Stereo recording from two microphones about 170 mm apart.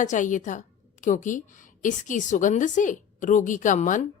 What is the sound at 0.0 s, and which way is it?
A woman's voice, 45° left (ahead or behind).